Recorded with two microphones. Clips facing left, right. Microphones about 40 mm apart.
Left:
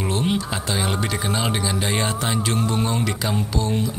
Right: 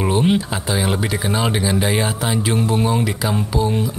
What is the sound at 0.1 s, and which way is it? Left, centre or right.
Speech, centre.